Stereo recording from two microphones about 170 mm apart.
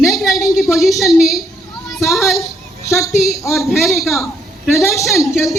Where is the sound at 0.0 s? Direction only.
Centre (ahead or behind).